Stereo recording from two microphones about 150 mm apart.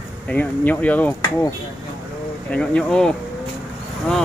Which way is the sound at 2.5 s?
5° left (ahead or behind).